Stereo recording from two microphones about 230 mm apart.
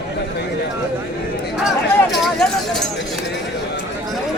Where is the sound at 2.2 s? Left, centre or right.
Centre.